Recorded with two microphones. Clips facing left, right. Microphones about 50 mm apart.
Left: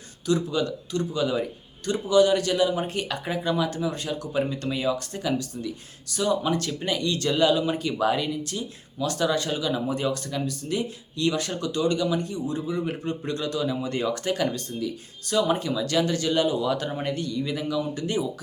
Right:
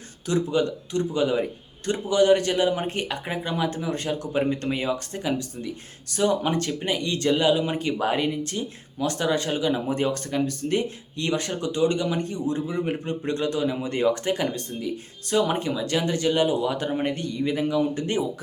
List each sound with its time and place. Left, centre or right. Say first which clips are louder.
0.3 s speech: right 1 dB; right
11.3 s speech: right 1 dB; right